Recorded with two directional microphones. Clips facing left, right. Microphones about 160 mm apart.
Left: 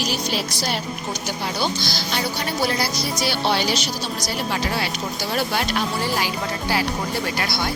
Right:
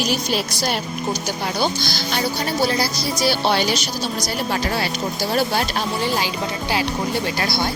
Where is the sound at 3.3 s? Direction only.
45° right (ahead or behind).